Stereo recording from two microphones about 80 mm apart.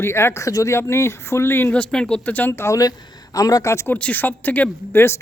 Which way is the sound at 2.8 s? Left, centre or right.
Left.